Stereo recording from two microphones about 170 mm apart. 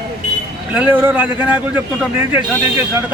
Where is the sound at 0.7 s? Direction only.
10° right (ahead or behind).